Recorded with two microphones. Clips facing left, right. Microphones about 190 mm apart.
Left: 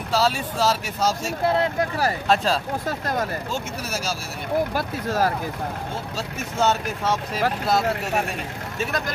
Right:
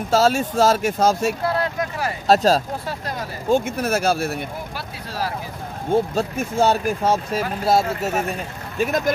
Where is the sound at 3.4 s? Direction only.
55° right (ahead or behind).